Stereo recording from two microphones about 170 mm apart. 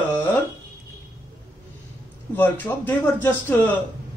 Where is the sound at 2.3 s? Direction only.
10° left (ahead or behind).